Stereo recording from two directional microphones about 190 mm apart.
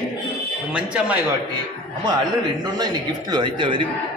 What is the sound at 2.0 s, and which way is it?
A man's voice, 20° right (ahead or behind).